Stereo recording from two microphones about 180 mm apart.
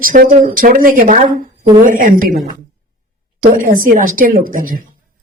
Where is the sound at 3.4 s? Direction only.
45° right (ahead or behind).